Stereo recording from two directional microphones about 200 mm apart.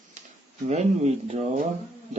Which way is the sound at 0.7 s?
35° right (ahead or behind).